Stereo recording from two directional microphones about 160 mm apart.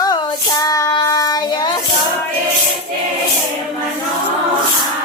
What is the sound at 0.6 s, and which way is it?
Child singing, 20° left (ahead or behind).